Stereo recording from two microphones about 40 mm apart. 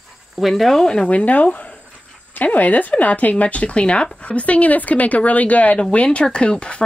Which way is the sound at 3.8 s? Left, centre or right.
Left.